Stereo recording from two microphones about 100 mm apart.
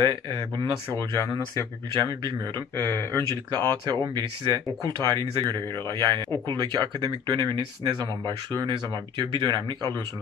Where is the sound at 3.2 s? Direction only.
45° right (ahead or behind).